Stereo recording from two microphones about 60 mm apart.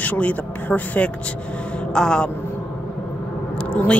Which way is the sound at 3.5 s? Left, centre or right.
Centre.